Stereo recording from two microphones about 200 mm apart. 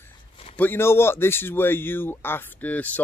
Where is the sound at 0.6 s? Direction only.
10° left (ahead or behind).